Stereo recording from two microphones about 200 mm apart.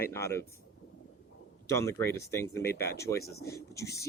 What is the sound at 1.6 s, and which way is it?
Speech, 15° left (ahead or behind).